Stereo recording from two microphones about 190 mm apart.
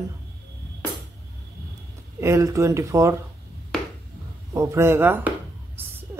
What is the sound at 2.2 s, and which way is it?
Speech, 15° right (ahead or behind).